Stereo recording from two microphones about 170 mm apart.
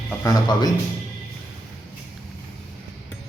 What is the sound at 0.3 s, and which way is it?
Speech, 25° left (ahead or behind).